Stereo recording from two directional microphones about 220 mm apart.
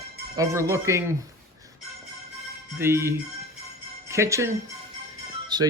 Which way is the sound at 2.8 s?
10° right (ahead or behind).